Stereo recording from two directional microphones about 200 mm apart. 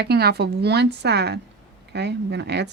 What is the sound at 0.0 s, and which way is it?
Speech, 55° right (ahead or behind).